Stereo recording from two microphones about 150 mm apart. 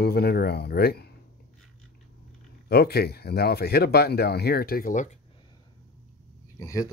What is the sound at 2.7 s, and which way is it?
Speech, 90° left.